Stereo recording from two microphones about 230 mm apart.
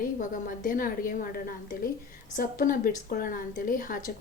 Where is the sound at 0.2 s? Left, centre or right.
Left.